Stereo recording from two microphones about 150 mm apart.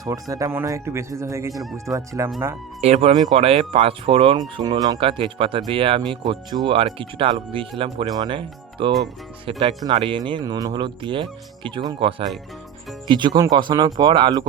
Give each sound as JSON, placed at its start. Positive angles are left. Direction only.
{"t": 0.0, "sound": "speech", "side_deg": -25}
{"t": 2.8, "sound": "speech", "side_deg": -40}
{"t": 4.9, "sound": "speech", "side_deg": -35}